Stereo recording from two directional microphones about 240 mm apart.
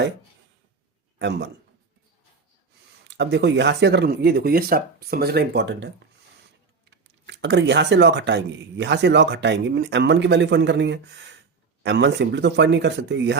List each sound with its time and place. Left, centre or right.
1.2 s speech: right
3.2 s speech: right
6.9 s speech: right